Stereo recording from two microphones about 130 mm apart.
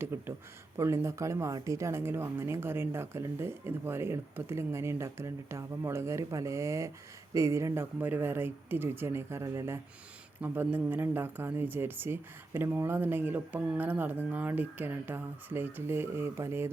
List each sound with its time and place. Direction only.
0.0 s speech: 20° right (ahead or behind)